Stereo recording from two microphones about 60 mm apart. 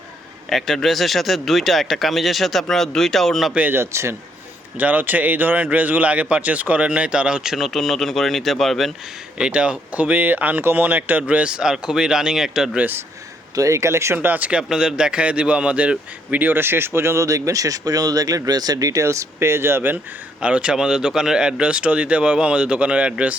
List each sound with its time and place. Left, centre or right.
0.5 s speech: centre
3.9 s speech: right
4.8 s speech: right; by 8.9 s centre
9.4 s speech: centre
11.2 s speech: centre
13.6 s speech: right
14.2 s speech: right
14.7 s speech: centre
16.6 s speech: right
20.4 s speech: centre